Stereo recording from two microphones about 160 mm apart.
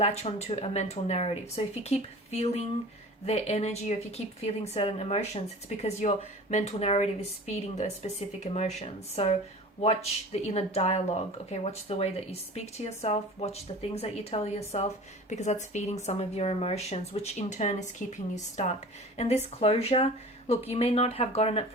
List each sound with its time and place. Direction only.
0.0 s speech: 40° left (ahead or behind)
19.1 s speech: 45° left (ahead or behind)